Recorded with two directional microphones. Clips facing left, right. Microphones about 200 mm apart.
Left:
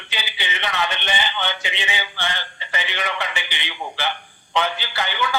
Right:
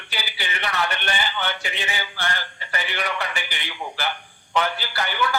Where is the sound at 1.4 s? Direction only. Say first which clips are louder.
Left 1 dB; 20° left (ahead or behind).